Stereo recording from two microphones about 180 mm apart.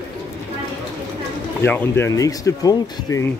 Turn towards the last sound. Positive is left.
turn(degrees=20)  # may be behind; listen again after turning